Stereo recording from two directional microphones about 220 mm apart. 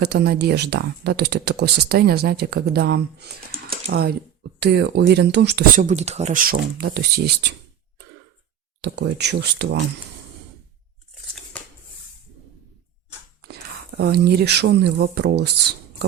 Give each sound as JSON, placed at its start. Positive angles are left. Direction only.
{"t": 0.0, "sound": "speech", "side_deg": -45}
{"t": 8.8, "sound": "speech", "side_deg": -50}
{"t": 13.4, "sound": "speech", "side_deg": -45}